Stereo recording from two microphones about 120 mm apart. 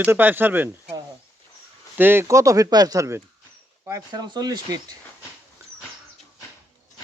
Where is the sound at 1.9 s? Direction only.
15° right (ahead or behind); by 4.6 s 35° right (ahead or behind).